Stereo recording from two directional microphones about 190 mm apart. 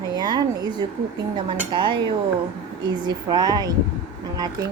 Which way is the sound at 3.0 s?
20° right (ahead or behind).